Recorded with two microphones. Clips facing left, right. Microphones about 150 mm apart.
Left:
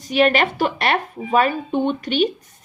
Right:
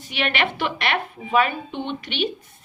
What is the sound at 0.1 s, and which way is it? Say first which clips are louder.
A woman's voice: left 8 dB; 40° left (ahead or behind).